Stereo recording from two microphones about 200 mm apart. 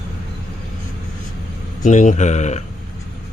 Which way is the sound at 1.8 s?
40° left (ahead or behind).